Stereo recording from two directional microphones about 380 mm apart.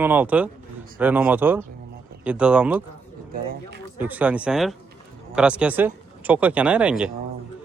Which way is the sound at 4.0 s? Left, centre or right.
Centre.